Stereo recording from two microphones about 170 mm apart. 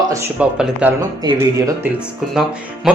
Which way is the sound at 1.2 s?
20° right (ahead or behind).